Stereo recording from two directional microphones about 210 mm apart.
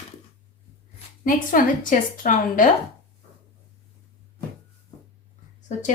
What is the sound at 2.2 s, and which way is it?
Speech, 40° left (ahead or behind).